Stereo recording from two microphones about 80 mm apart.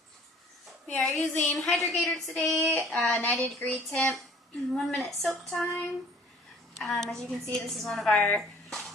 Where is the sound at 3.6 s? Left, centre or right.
Centre.